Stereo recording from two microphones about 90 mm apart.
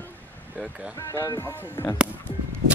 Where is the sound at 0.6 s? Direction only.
5° right (ahead or behind).